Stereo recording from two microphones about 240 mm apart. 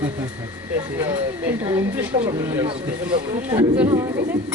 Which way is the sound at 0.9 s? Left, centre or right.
Centre.